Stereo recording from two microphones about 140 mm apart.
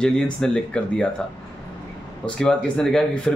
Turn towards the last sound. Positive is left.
turn(degrees=5)  # may be behind; listen again after turning